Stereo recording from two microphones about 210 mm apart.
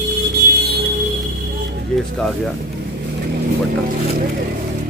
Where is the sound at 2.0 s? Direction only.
Centre (ahead or behind).